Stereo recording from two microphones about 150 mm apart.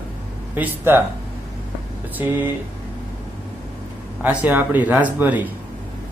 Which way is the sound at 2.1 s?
10° right (ahead or behind).